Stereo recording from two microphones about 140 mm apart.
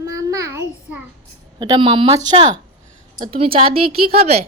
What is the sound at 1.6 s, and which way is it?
A woman's voice, 35° right (ahead or behind).